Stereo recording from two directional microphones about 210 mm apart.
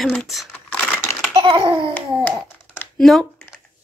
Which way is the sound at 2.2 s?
10° left (ahead or behind).